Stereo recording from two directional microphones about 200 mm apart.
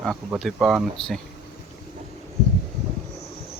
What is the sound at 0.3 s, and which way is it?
Speech, centre (ahead or behind).